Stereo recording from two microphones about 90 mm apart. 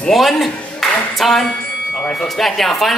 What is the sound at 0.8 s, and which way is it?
Clapping, centre (ahead or behind).